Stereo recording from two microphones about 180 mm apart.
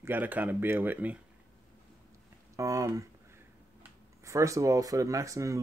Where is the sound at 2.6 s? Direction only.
20° right (ahead or behind).